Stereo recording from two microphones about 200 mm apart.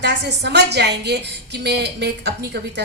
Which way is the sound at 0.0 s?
55° right (ahead or behind).